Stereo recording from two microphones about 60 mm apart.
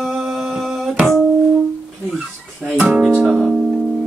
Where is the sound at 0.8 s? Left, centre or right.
Right.